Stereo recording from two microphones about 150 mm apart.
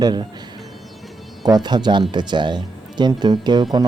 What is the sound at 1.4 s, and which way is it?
Speech, 30° right (ahead or behind).